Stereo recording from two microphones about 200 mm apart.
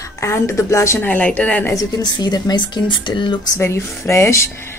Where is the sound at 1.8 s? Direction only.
20° left (ahead or behind).